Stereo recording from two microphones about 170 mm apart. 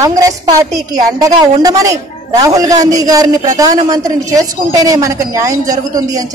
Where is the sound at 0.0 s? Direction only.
20° right (ahead or behind).